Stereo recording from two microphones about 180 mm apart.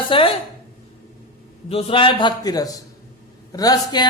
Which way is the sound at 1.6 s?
30° left (ahead or behind).